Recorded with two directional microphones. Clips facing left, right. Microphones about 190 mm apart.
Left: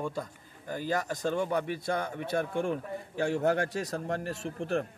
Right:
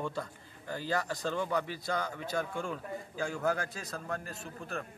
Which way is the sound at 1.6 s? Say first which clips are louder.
Left 4 dB; 60° left (ahead or behind).